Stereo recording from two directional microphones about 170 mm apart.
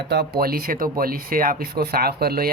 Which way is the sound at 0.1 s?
65° right (ahead or behind).